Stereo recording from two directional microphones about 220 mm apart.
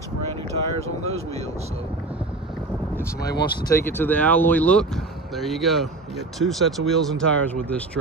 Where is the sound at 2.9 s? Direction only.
10° left (ahead or behind).